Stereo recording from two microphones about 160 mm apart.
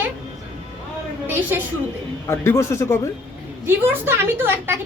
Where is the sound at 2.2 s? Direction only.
15° left (ahead or behind).